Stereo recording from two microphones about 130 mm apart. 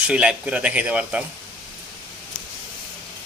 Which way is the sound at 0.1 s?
5° right (ahead or behind).